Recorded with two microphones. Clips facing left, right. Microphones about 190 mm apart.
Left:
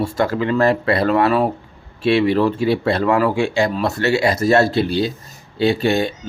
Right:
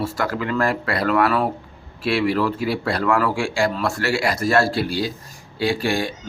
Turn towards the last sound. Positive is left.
turn(degrees=25)  # may be behind; listen again after turning